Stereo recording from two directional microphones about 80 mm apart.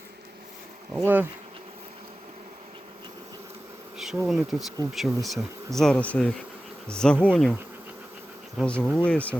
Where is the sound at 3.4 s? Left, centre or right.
Right.